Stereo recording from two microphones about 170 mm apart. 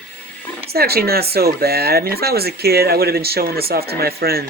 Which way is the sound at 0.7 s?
65° right (ahead or behind).